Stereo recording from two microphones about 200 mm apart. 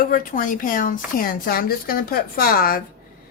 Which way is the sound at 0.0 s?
45° left (ahead or behind).